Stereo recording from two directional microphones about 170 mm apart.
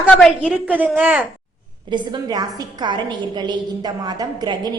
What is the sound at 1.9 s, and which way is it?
A woman's voice, 25° right (ahead or behind).